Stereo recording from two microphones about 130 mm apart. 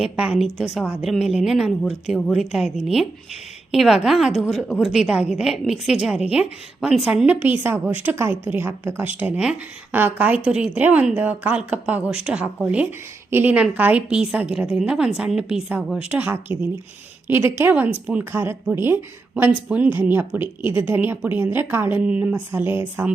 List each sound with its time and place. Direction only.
0.0 s a woman's voice: 5° right (ahead or behind)
7.4 s speech: 15° right (ahead or behind)